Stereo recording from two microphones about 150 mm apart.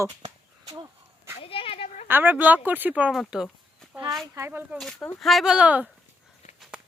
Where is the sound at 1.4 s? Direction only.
40° left (ahead or behind).